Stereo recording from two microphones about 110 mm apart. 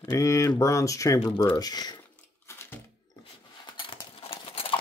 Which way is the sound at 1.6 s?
35° left (ahead or behind).